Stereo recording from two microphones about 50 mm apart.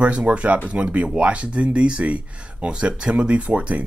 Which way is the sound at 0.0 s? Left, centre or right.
Right.